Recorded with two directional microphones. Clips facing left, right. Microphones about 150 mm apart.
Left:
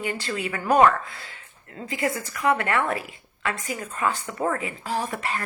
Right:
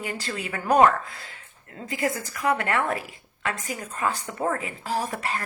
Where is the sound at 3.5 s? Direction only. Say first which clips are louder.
Left 1 dB; 35° right (ahead or behind).